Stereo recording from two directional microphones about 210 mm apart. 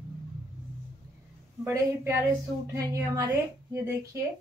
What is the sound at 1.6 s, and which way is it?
Speech, 10° right (ahead or behind).